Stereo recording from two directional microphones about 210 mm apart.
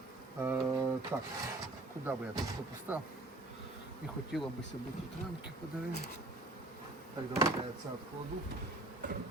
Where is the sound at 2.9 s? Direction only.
10° right (ahead or behind).